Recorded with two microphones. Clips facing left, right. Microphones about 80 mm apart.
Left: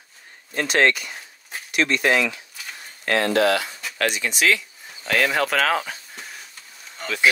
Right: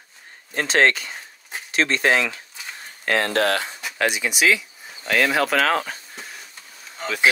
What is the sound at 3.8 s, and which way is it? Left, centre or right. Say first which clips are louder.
Speech: right 1 dB; centre.